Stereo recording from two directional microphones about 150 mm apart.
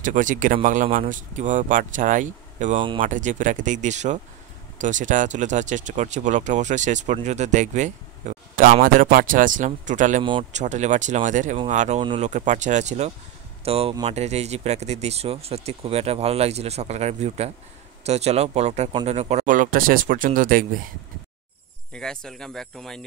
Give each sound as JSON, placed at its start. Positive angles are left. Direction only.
{"t": 0.0, "sound": "speech", "side_deg": -60}
{"t": 19.4, "sound": "speech", "side_deg": -60}
{"t": 21.9, "sound": "speech", "side_deg": 5}